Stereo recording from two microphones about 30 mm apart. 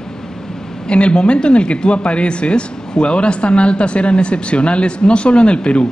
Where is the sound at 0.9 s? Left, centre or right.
Left.